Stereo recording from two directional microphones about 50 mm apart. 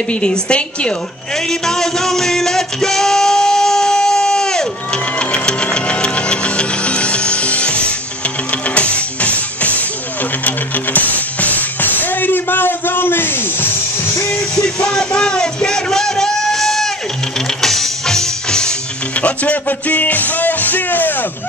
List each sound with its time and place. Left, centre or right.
0.1 s a woman's voice: left
1.5 s music: centre; by 13.7 s left
14.5 s music: centre
19.2 s music: left